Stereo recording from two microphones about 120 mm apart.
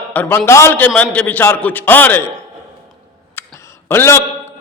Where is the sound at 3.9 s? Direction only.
20° left (ahead or behind).